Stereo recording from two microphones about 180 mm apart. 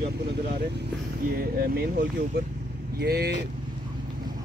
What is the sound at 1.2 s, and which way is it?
Speech, 55° right (ahead or behind).